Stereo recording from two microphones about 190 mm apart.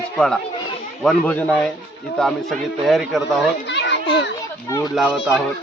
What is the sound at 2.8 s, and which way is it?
Speech, centre (ahead or behind).